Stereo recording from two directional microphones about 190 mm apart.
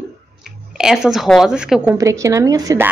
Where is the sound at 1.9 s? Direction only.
15° right (ahead or behind).